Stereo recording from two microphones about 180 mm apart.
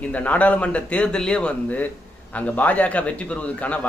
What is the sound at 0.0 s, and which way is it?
A man's voice, 10° left (ahead or behind).